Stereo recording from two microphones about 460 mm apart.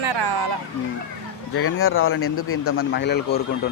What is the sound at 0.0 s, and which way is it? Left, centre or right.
Music, right.